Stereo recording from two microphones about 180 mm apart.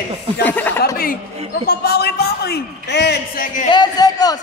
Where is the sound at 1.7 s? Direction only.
60° left (ahead or behind).